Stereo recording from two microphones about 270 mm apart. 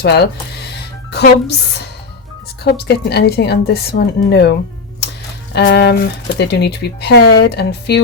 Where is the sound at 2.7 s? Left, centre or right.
Left.